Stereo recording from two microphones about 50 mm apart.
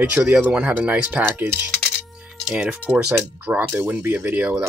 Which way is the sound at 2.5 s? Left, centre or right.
Centre.